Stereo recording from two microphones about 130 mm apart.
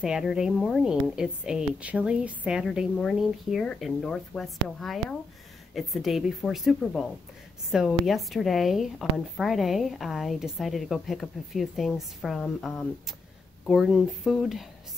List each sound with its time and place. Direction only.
0.0 s a woman's voice: 5° right (ahead or behind)